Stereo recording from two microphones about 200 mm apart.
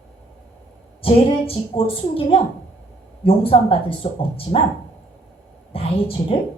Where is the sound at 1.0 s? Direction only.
30° left (ahead or behind).